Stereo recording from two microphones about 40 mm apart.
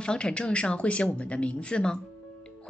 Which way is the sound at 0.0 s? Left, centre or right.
Left.